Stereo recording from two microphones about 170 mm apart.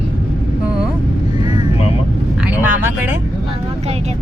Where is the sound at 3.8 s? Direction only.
40° right (ahead or behind).